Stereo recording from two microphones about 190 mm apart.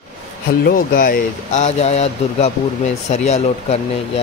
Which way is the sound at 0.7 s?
50° left (ahead or behind).